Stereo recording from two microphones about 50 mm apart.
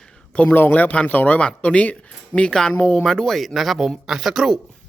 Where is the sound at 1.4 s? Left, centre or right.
Left.